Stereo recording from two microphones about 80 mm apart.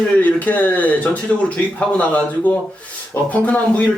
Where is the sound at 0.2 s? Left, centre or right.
Centre.